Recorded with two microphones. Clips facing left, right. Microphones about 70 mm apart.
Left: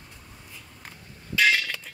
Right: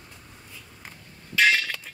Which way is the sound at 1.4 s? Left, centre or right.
Right.